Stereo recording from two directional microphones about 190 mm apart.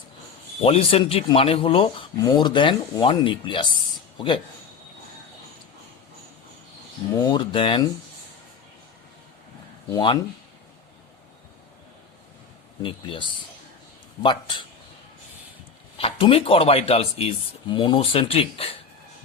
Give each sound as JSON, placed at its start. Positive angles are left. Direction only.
{"t": 0.6, "sound": "speech", "side_deg": 30}
{"t": 7.2, "sound": "speech", "side_deg": 25}
{"t": 9.9, "sound": "speech", "side_deg": 25}
{"t": 12.8, "sound": "speech", "side_deg": 25}
{"t": 16.0, "sound": "speech", "side_deg": 30}